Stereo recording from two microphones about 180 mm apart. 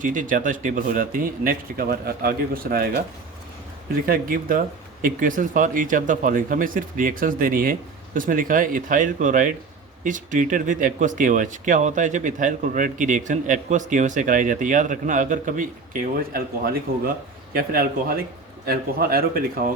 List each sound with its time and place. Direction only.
0.0 s speech: 45° right (ahead or behind)
4.0 s a man's voice: 55° right (ahead or behind)